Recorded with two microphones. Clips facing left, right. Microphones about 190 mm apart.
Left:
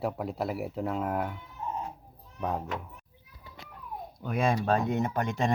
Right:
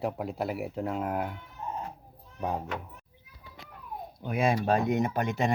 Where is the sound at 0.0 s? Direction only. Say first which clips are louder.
Even; centre (ahead or behind).